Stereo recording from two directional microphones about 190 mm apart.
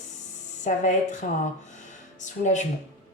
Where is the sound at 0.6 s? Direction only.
40° left (ahead or behind).